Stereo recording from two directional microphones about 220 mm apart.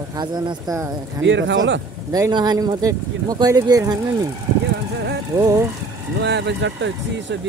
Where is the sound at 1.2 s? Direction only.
55° right (ahead or behind).